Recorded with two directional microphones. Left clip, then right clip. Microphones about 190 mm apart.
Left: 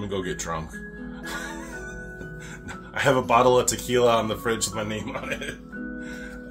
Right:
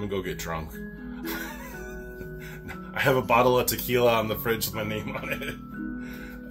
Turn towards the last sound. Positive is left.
turn(degrees=15)  # may be behind; listen again after turning